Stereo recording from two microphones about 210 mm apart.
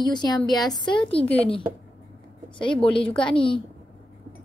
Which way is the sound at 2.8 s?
25° left (ahead or behind).